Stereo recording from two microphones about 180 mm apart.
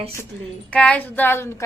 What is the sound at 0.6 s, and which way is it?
Speech, 5° left (ahead or behind).